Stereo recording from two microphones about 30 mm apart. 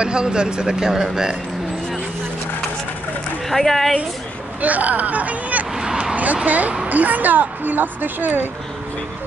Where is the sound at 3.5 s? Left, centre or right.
Centre.